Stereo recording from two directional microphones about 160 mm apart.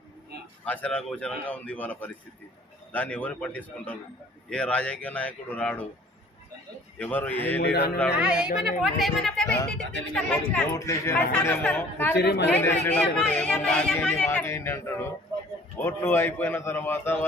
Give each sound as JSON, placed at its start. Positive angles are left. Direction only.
{"t": 0.6, "sound": "speech", "side_deg": 10}
{"t": 7.0, "sound": "speech", "side_deg": 10}
{"t": 7.6, "sound": "a man's voice", "side_deg": 80}
{"t": 8.1, "sound": "a woman's voice", "side_deg": -5}
{"t": 12.1, "sound": "speech", "side_deg": 90}
{"t": 12.5, "sound": "speech", "side_deg": 10}